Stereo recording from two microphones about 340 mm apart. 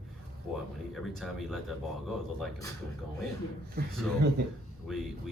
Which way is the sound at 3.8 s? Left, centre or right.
Right.